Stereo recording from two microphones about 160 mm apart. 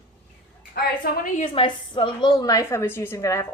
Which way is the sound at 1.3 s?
35° left (ahead or behind).